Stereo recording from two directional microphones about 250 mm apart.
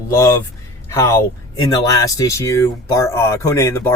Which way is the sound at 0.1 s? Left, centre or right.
Centre.